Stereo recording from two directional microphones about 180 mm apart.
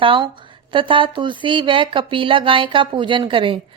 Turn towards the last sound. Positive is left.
turn(degrees=-30)  # may be behind; listen again after turning